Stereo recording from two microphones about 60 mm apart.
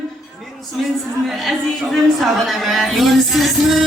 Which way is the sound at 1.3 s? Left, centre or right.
Centre.